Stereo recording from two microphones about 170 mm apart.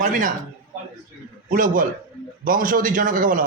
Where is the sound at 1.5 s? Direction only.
50° right (ahead or behind).